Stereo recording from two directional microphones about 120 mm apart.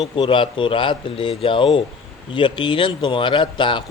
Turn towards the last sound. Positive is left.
turn(degrees=40)  # may be behind; listen again after turning